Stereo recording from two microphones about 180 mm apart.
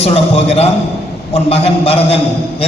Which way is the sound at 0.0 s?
35° left (ahead or behind).